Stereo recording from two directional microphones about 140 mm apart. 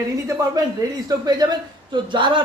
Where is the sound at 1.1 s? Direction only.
25° right (ahead or behind).